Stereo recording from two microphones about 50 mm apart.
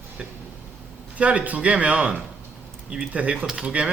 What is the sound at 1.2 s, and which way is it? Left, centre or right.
Speech, right.